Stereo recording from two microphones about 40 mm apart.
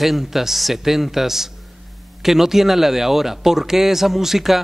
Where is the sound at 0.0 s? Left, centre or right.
Centre.